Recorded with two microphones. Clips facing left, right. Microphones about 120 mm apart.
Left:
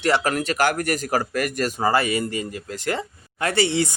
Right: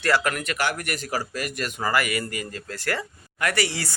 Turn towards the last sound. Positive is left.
turn(degrees=25)  # may be behind; listen again after turning